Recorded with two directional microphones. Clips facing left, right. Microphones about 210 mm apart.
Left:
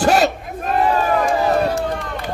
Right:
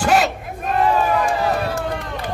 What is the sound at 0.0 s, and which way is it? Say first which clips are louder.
Battle cry: left 2 dB; 40° left (ahead or behind).